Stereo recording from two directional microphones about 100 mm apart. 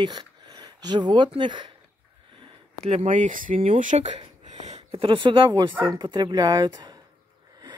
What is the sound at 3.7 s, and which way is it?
Speech, 85° right.